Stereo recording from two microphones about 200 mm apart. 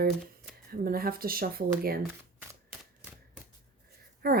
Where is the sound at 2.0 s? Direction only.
10° right (ahead or behind).